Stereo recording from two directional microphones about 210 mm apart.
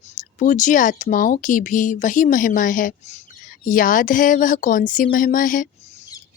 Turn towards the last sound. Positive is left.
turn(degrees=40)  # may be behind; listen again after turning